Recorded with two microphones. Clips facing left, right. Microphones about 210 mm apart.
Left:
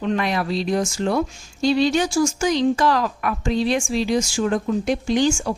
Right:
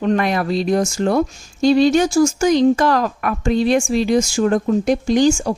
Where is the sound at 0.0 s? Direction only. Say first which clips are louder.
Right 4 dB; 50° right (ahead or behind).